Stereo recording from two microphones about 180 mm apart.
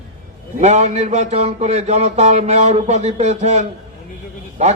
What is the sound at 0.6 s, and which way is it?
Speech, 40° right (ahead or behind).